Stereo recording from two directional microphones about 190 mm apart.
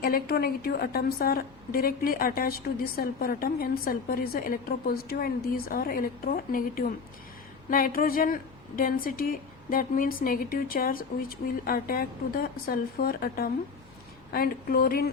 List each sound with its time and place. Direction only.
0.0 s a woman's voice: 55° left (ahead or behind)